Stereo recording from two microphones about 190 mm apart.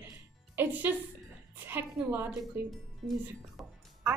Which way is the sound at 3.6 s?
Centre (ahead or behind).